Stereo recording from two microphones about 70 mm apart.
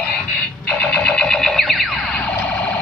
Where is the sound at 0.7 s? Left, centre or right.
Centre.